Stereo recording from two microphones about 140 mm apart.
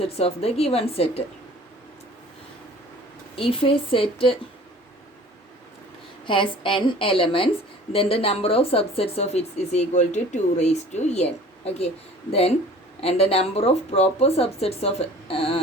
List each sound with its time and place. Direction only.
0.0 s speech: 45° left (ahead or behind)
3.3 s a woman's voice: 40° left (ahead or behind)
6.2 s a woman's voice: 35° left (ahead or behind)